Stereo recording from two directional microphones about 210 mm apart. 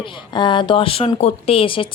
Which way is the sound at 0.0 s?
25° left (ahead or behind).